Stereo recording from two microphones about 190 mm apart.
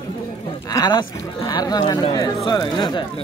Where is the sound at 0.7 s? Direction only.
20° left (ahead or behind).